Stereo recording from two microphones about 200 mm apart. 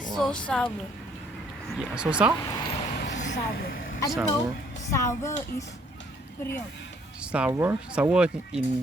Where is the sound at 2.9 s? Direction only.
60° left (ahead or behind).